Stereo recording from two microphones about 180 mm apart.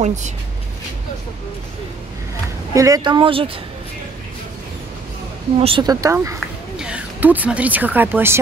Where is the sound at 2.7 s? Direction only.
20° right (ahead or behind).